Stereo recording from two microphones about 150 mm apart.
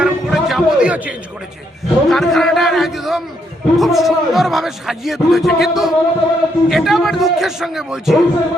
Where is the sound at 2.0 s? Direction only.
Centre (ahead or behind).